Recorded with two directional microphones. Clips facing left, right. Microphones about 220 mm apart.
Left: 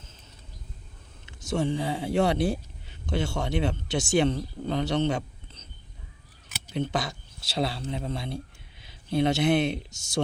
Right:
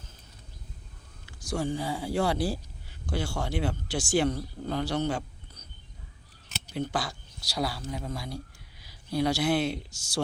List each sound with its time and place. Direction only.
1.2 s speech: 25° left (ahead or behind)
6.7 s speech: 20° left (ahead or behind)